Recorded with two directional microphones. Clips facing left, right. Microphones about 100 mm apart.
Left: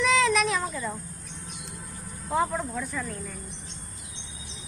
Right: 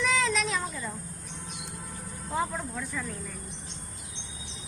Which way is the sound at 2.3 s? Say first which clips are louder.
Left 5 dB; 80° left.